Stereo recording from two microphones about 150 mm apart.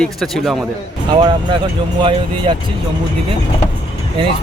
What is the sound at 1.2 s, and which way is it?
Speech, 30° right (ahead or behind).